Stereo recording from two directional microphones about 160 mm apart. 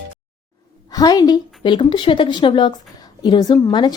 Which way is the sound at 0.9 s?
25° left (ahead or behind).